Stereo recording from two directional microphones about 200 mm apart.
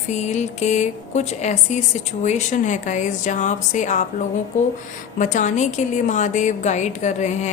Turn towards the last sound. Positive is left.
turn(degrees=35)  # may be behind; listen again after turning